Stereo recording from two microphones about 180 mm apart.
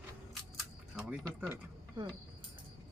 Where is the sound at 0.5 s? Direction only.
5° right (ahead or behind).